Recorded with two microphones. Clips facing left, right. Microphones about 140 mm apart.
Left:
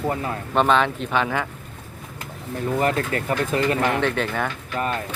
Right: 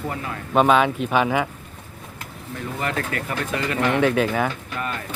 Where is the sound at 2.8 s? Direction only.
35° left (ahead or behind).